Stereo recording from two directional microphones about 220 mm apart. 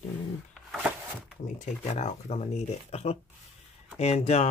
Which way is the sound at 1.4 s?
35° left (ahead or behind).